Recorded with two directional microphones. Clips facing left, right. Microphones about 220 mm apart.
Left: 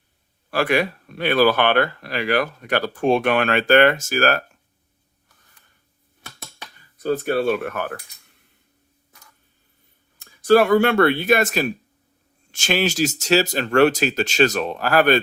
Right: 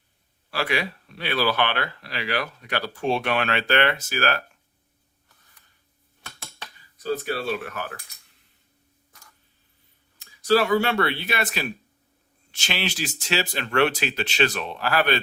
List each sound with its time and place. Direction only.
0.5 s speech: 50° left (ahead or behind)
7.0 s speech: 55° left (ahead or behind)
10.2 s speech: 55° left (ahead or behind)